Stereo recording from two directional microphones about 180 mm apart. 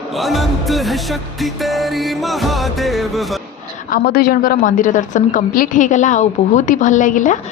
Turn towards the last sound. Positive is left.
turn(degrees=45)  # may be behind; listen again after turning